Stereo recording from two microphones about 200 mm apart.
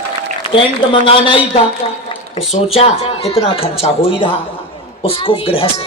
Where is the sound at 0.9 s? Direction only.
25° left (ahead or behind).